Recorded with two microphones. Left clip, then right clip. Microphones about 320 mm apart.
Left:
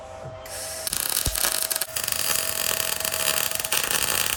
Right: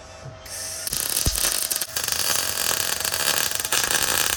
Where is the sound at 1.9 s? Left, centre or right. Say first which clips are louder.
Right 4 dB; centre.